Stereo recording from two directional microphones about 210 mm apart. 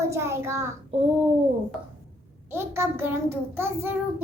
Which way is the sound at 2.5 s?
10° right (ahead or behind).